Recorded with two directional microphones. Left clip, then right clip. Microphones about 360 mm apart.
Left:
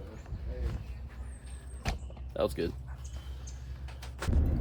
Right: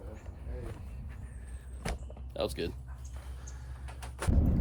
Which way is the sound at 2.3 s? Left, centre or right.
Centre.